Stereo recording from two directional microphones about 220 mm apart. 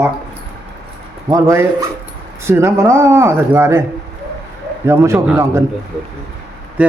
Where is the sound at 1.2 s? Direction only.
15° right (ahead or behind).